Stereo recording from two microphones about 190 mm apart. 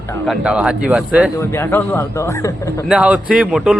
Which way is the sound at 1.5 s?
15° left (ahead or behind).